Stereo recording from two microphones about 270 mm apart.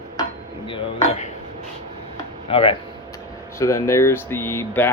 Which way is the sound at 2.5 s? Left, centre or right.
Left.